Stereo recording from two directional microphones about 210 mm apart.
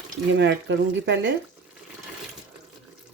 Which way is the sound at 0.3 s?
60° right (ahead or behind).